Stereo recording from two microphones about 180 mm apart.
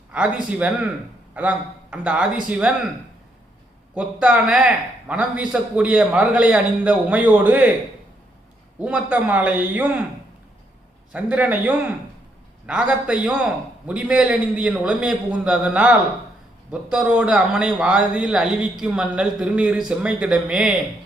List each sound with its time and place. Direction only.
0.1 s a man's voice: 5° right (ahead or behind)
3.9 s a man's voice: 5° right (ahead or behind)
8.8 s a man's voice: 5° right (ahead or behind)
11.1 s a man's voice: 10° right (ahead or behind)